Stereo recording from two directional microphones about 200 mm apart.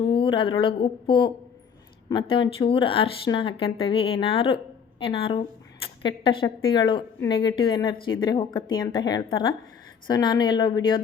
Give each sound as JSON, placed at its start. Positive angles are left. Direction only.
{"t": 0.0, "sound": "speech", "side_deg": 25}